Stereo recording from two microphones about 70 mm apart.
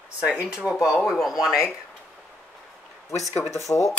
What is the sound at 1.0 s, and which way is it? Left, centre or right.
Speech, centre.